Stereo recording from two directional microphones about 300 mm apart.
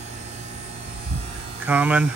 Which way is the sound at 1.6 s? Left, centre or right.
Centre.